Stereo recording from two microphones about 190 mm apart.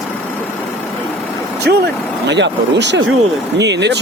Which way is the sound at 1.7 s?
60° right (ahead or behind).